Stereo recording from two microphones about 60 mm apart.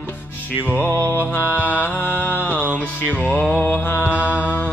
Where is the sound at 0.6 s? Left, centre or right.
Left.